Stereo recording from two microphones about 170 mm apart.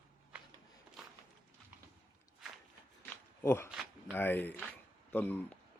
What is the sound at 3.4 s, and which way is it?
Speech, 15° left (ahead or behind).